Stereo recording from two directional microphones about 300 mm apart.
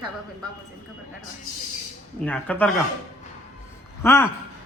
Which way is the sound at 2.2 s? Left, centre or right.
Centre.